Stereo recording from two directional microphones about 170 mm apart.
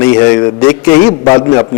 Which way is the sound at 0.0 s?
15° left (ahead or behind).